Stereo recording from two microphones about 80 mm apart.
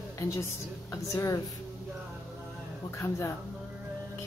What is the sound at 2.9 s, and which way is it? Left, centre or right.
Speech, left.